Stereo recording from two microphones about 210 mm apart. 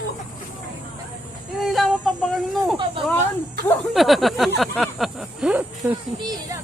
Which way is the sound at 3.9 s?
Centre (ahead or behind).